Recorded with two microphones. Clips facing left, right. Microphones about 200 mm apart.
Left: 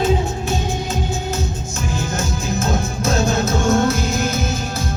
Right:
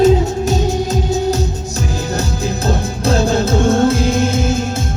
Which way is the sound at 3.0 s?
30° right (ahead or behind).